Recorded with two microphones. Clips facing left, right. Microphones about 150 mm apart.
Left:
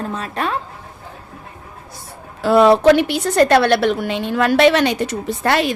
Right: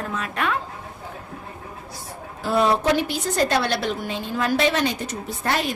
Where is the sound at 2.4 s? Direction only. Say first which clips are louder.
Left 9 dB; 80° left.